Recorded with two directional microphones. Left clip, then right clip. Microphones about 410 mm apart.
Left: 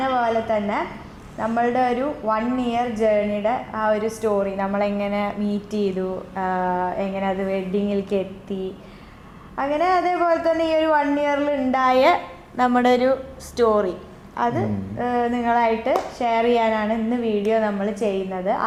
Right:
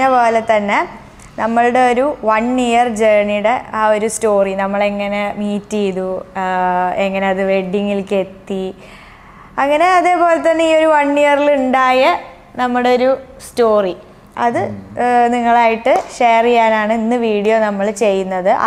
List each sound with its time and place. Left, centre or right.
0.0 s a woman's voice: right
9.6 s speech: right
12.5 s speech: right